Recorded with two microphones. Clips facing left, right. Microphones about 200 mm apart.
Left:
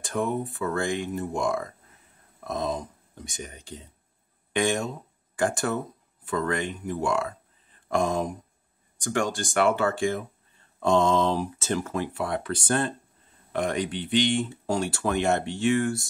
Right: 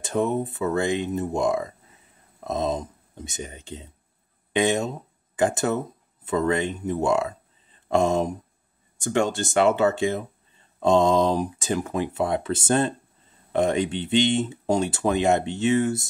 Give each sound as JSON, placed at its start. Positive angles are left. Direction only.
{"t": 0.0, "sound": "speech", "side_deg": -25}